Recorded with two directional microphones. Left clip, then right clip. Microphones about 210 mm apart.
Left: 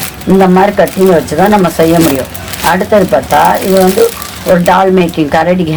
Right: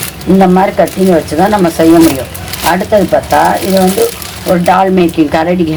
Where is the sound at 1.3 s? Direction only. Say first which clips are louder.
Left 1 dB; 35° left (ahead or behind).